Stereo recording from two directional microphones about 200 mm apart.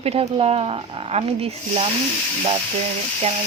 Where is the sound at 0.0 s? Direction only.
30° right (ahead or behind).